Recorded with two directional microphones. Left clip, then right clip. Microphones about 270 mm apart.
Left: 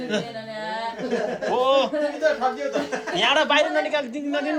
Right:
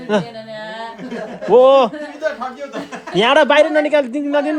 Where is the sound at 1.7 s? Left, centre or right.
Centre.